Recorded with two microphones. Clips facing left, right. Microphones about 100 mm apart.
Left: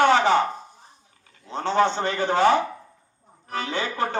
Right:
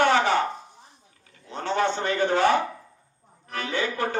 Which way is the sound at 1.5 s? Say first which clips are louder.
Left 4 dB; 30° left (ahead or behind).